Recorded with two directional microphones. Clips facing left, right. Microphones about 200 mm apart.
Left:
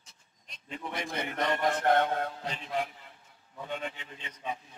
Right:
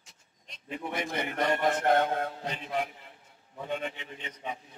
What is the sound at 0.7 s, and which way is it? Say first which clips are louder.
A man's voice: right 3 dB; 20° right (ahead or behind).